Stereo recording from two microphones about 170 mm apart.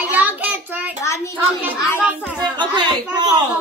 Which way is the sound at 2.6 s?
25° right (ahead or behind).